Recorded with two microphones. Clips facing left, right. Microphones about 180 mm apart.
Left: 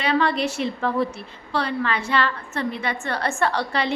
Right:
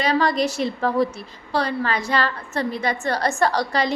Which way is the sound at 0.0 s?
40° right (ahead or behind).